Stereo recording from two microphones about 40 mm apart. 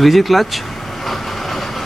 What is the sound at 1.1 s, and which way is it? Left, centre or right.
Train, centre.